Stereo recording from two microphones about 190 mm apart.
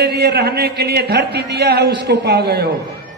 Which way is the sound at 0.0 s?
60° right (ahead or behind).